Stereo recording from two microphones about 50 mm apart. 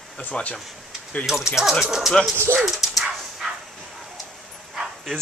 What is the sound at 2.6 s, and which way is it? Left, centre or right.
Dog, centre.